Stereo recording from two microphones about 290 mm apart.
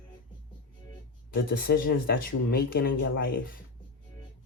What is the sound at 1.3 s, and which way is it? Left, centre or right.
Speech, left.